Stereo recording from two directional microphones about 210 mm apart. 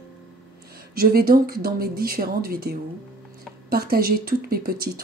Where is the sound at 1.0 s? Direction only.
45° right (ahead or behind).